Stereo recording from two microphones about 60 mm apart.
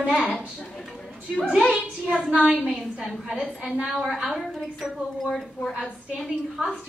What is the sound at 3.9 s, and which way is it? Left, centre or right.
A woman's voice, centre.